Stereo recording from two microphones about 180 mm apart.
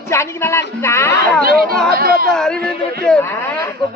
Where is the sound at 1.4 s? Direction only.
55° right (ahead or behind).